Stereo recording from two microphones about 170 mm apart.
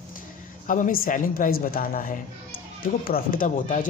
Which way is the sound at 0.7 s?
55° left (ahead or behind).